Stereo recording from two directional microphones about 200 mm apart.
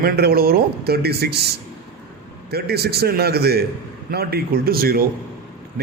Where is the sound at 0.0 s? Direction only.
50° right (ahead or behind).